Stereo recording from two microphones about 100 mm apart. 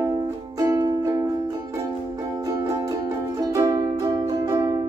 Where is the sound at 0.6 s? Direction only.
40° right (ahead or behind).